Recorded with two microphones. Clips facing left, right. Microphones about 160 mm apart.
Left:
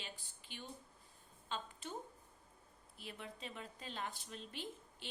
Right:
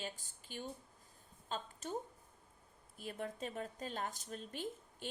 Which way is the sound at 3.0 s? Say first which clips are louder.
Right 7 dB; 45° right (ahead or behind).